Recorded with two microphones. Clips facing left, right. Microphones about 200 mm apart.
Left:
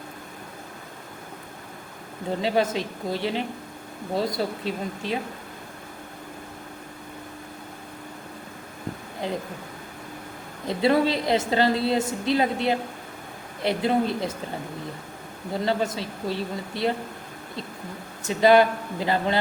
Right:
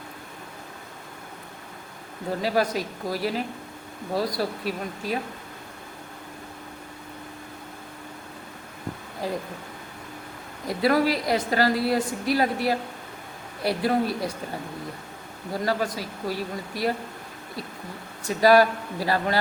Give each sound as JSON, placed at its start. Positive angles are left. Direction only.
{"t": 2.4, "sound": "a woman's voice", "side_deg": 25}
{"t": 9.2, "sound": "a woman's voice", "side_deg": 20}
{"t": 10.7, "sound": "a woman's voice", "side_deg": 25}
{"t": 15.6, "sound": "a woman's voice", "side_deg": 25}
{"t": 18.2, "sound": "a woman's voice", "side_deg": 20}